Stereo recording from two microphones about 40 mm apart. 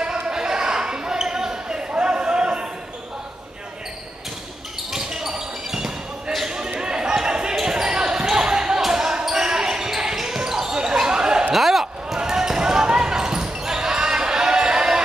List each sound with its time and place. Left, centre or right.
0.0 s basketball bounce: centre
5.3 s basketball bounce: centre
11.5 s a sound: centre
11.8 s basketball bounce: centre